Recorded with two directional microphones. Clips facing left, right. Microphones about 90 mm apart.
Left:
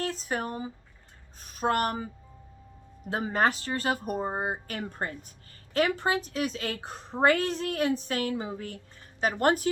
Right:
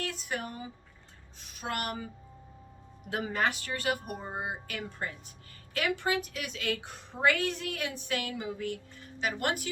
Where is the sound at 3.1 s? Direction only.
35° left (ahead or behind).